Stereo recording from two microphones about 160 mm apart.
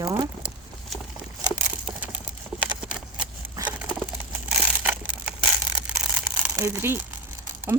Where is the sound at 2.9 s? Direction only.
5° right (ahead or behind).